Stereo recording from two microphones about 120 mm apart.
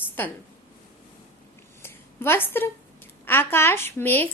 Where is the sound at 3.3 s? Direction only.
20° left (ahead or behind).